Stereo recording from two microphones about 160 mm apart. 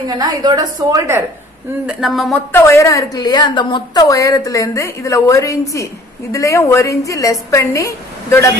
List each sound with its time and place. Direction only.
0.2 s a woman's voice: 25° right (ahead or behind)
1.9 s speech: centre (ahead or behind)
2.5 s a woman's voice: 15° left (ahead or behind)